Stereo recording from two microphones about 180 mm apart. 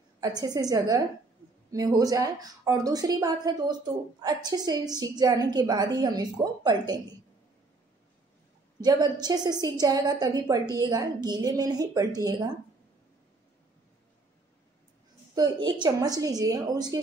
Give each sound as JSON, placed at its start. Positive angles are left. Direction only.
{"t": 0.2, "sound": "a woman's voice", "side_deg": -20}
{"t": 8.8, "sound": "a woman's voice", "side_deg": -25}
{"t": 15.3, "sound": "a woman's voice", "side_deg": -25}